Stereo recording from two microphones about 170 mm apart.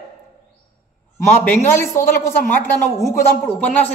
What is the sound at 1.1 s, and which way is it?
A man's voice, 10° left (ahead or behind).